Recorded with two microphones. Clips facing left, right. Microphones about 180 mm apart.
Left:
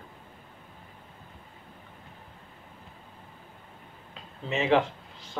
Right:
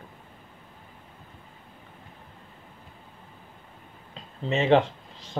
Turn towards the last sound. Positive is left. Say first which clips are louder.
# right 4 dB
turn(degrees=-35)  # may be behind; listen again after turning